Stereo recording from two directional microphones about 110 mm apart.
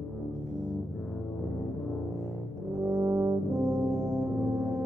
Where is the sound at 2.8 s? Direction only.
25° right (ahead or behind).